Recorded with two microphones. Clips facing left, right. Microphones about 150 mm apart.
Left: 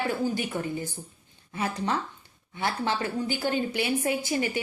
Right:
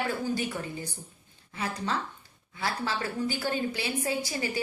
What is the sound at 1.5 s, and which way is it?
A woman's voice, 30° left (ahead or behind).